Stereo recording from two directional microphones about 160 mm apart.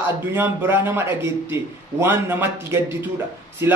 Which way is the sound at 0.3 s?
15° right (ahead or behind).